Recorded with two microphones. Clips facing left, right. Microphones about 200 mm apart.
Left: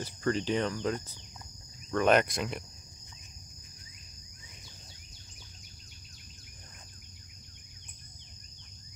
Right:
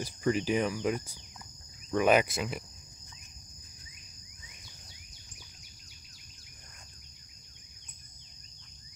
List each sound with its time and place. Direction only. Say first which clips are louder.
0.0 s speech: right 1 dB; 10° right (ahead or behind)
1.9 s cricket: even; 10° right (ahead or behind)